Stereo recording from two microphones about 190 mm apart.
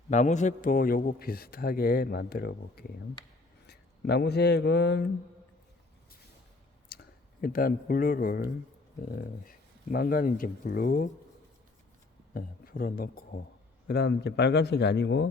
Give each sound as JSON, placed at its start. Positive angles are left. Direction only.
{"t": 0.1, "sound": "a man's voice", "side_deg": 40}
{"t": 6.9, "sound": "a sound", "side_deg": 50}
{"t": 7.4, "sound": "a man's voice", "side_deg": 50}
{"t": 9.9, "sound": "a man's voice", "side_deg": 50}
{"t": 12.3, "sound": "a man's voice", "side_deg": 50}